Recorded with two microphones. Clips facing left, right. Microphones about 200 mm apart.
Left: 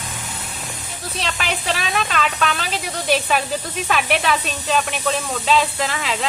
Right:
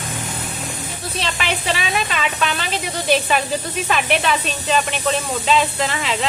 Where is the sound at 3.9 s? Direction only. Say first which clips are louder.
Even; centre (ahead or behind).